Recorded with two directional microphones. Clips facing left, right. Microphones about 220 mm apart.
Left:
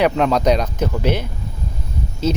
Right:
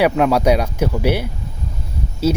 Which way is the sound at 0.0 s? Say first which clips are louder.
Right 1 dB; 10° right (ahead or behind).